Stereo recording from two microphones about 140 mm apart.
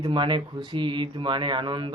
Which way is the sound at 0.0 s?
35° right (ahead or behind).